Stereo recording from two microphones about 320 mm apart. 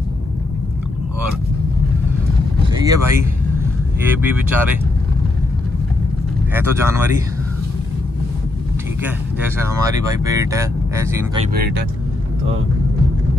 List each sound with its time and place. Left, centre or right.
2.8 s speech: centre
6.5 s speech: centre
9.4 s speech: centre
11.5 s speech: right